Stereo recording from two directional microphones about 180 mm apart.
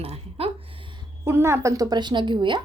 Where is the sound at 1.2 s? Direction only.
15° right (ahead or behind).